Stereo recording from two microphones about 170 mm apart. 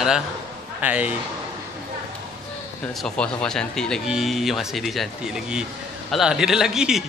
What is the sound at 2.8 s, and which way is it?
Speech, 5° left (ahead or behind).